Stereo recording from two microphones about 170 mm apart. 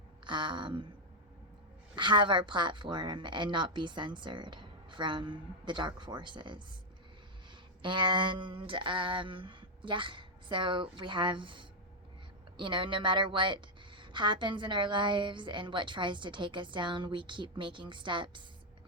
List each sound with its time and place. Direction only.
0.3 s a woman's voice: 30° right (ahead or behind)
2.0 s a woman's voice: 30° right (ahead or behind)
7.8 s a woman's voice: 30° right (ahead or behind)